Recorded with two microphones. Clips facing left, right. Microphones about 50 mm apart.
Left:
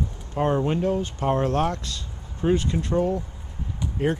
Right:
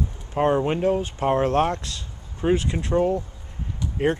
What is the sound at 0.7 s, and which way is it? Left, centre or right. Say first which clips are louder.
Speech: right 2 dB; right.